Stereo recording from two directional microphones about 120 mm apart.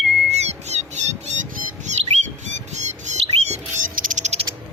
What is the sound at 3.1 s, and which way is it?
Bird, 65° right (ahead or behind).